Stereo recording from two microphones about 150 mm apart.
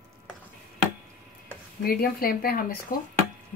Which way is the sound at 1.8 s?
85° left.